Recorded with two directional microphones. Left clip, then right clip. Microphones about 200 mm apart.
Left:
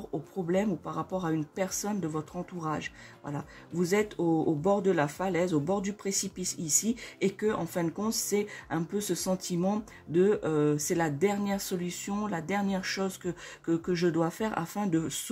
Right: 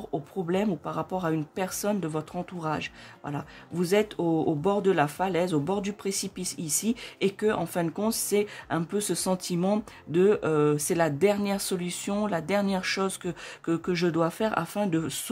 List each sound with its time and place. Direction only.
0.1 s speech: 30° right (ahead or behind)